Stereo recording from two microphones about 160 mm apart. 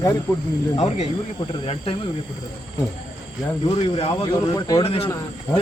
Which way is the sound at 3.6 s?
40° left (ahead or behind).